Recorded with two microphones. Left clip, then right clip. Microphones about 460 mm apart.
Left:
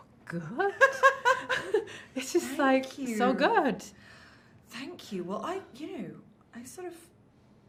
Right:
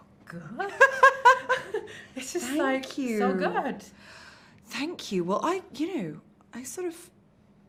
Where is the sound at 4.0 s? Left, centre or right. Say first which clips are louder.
Right 5 dB; right.